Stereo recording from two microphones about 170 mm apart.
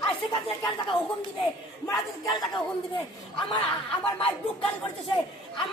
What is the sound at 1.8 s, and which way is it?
Speech, 20° left (ahead or behind).